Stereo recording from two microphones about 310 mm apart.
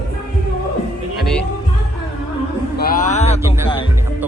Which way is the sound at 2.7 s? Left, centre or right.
Left.